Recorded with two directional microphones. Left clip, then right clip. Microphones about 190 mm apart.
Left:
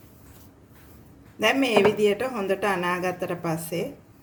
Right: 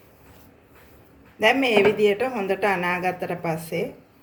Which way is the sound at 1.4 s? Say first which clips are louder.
Right 2 dB; 40° left (ahead or behind).